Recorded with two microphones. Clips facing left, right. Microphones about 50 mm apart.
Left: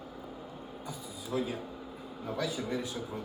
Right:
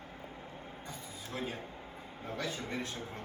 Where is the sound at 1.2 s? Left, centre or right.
Right.